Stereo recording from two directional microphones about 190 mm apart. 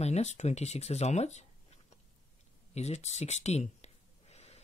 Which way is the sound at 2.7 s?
35° left (ahead or behind).